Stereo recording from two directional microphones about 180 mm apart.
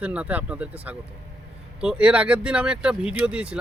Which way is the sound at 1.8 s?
5° right (ahead or behind).